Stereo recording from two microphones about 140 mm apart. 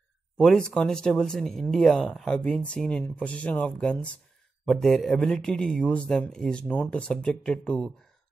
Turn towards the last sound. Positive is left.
turn(degrees=5)  # may be behind; listen again after turning